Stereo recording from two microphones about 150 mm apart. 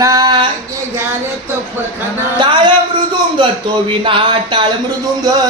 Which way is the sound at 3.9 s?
35° right (ahead or behind).